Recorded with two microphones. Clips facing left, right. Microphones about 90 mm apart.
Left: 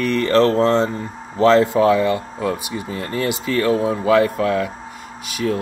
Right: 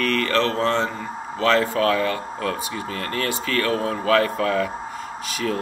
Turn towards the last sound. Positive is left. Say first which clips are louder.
# left 3 dB
turn(degrees=5)  # may be behind; listen again after turning